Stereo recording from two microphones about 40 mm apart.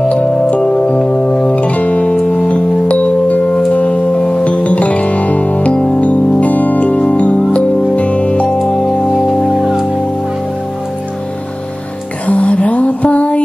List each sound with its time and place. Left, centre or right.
0.1 s music: left
4.1 s music: left
4.5 s music: left
9.1 s music: centre
9.5 s music: centre
12.3 s a sound: left